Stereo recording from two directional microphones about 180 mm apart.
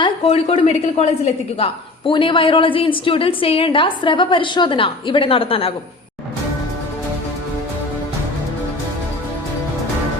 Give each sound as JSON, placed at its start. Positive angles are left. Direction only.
{"t": 0.0, "sound": "a woman's voice", "side_deg": 30}